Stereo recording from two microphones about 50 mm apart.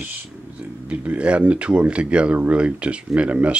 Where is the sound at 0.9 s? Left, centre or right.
Right.